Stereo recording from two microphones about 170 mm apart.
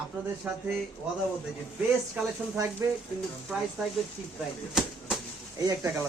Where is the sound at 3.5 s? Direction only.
10° right (ahead or behind).